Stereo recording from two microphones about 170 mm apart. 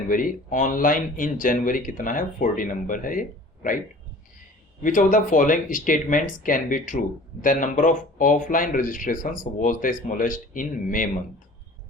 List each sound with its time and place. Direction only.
0.1 s speech: 50° left (ahead or behind)
4.8 s speech: 50° left (ahead or behind)